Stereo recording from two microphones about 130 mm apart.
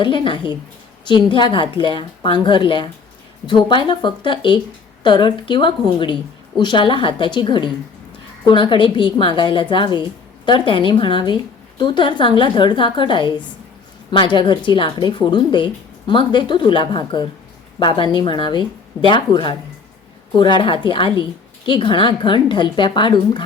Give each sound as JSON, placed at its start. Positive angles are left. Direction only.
{"t": 0.0, "sound": "a woman's voice", "side_deg": 40}
{"t": 14.3, "sound": "a woman's voice", "side_deg": 40}